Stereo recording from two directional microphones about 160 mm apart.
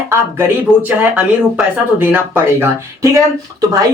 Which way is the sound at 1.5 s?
10° right (ahead or behind).